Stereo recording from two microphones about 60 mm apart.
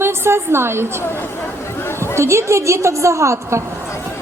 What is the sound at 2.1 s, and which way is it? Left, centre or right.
A woman's voice, right.